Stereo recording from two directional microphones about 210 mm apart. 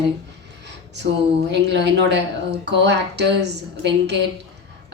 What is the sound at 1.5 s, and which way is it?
A woman's voice, 55° right (ahead or behind).